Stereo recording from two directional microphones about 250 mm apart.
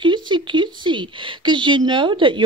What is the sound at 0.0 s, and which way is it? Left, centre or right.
A woman's voice, centre.